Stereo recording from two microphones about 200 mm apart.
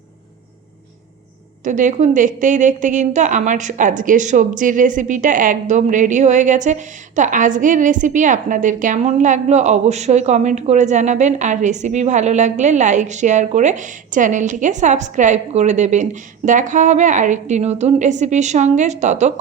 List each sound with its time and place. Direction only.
1.6 s a woman's voice: 40° right (ahead or behind)